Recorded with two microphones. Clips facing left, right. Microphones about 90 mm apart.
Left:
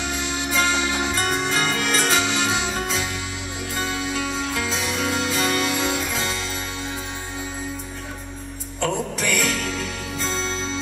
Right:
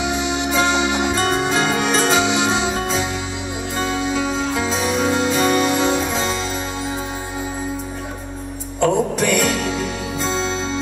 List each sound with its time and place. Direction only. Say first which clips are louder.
0.0 s music: right 6 dB; 15° right (ahead or behind)
2.0 s music: right 5 dB; 10° right (ahead or behind)
4.0 s music: right 5 dB; 10° right (ahead or behind)
4.9 s music: right 6 dB; 20° right (ahead or behind)
8.8 s music: right 7 dB; 5° right (ahead or behind)